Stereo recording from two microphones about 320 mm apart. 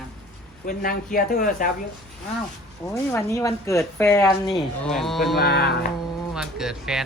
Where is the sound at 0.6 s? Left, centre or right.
Left.